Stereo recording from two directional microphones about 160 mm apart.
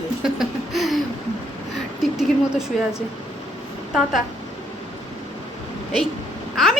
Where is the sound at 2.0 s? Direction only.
5° right (ahead or behind).